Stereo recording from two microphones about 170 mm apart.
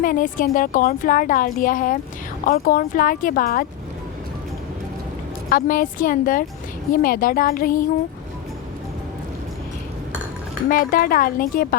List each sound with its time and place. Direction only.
0.0 s a woman's voice: 50° left (ahead or behind)
5.5 s speech: 55° left (ahead or behind)
10.7 s speech: 55° left (ahead or behind)